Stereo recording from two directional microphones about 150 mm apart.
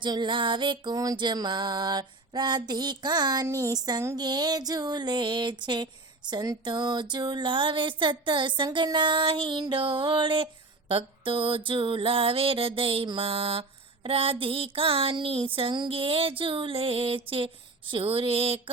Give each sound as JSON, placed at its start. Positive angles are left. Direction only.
{"t": 0.0, "sound": "music", "side_deg": -30}